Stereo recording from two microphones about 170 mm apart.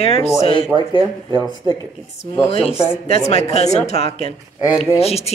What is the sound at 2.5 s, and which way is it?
A man's voice, 35° left (ahead or behind).